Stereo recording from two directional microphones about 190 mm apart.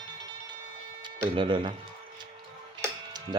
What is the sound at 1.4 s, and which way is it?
Speech, 25° right (ahead or behind).